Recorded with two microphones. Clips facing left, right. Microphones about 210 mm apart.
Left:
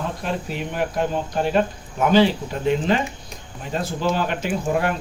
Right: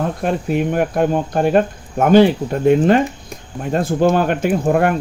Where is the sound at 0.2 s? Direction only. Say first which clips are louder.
Right 9 dB; 50° right (ahead or behind).